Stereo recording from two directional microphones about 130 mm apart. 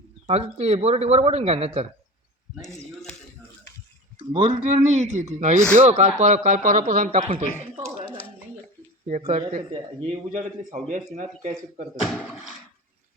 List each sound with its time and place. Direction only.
0.3 s speech: 55° right (ahead or behind)
2.7 s a sound: 5° left (ahead or behind)
4.3 s speech: 50° right (ahead or behind); by 7.4 s 65° right (ahead or behind)
9.0 s speech: 65° right (ahead or behind)
10.7 s speech: 75° right (ahead or behind)